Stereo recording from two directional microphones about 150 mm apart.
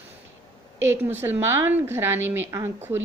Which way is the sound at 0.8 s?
15° right (ahead or behind).